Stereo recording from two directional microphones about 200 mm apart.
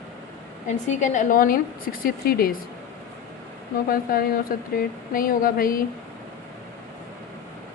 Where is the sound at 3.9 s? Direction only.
45° left (ahead or behind).